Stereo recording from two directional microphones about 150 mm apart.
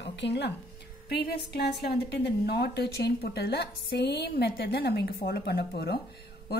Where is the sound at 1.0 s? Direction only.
90° left.